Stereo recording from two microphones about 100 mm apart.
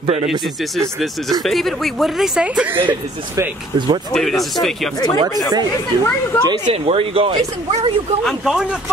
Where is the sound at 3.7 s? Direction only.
50° right (ahead or behind).